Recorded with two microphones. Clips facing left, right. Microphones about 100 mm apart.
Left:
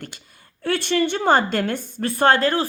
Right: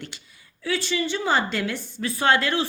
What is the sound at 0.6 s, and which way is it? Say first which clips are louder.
A woman's voice: left 5 dB; 60° left (ahead or behind).